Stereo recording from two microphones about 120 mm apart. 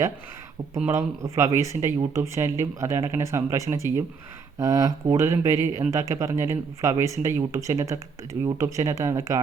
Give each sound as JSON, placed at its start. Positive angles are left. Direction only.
{"t": 0.9, "sound": "speech", "side_deg": -25}